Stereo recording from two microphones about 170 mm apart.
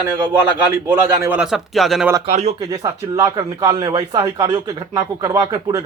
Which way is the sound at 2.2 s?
40° right (ahead or behind).